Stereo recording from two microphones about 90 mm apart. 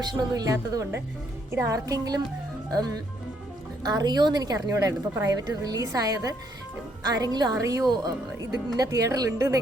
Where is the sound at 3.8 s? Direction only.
50° right (ahead or behind).